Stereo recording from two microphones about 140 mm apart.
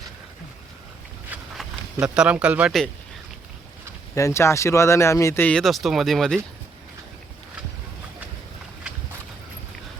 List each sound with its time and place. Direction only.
1.3 s a sound: 10° right (ahead or behind)
2.1 s speech: 5° right (ahead or behind)
4.1 s speech: 20° left (ahead or behind)
5.5 s speech: 5° left (ahead or behind)